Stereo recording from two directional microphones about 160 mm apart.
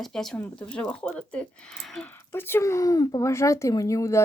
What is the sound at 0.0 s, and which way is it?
Speech, centre (ahead or behind).